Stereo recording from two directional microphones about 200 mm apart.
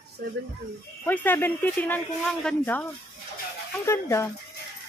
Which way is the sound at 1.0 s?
10° left (ahead or behind).